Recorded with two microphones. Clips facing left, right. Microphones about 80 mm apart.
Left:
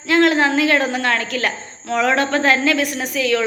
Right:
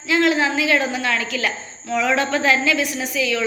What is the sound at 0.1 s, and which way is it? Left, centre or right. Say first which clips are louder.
A woman's voice: left 3 dB; left.